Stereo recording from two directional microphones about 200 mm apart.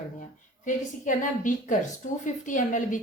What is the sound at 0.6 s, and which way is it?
Speech, 40° left (ahead or behind).